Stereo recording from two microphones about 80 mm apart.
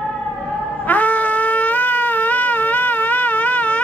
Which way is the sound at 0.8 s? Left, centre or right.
Left.